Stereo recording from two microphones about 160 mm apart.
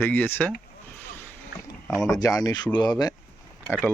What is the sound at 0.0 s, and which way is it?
Speech, 10° left (ahead or behind).